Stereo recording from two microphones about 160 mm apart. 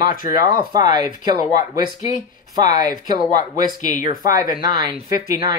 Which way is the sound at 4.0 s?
60° left (ahead or behind).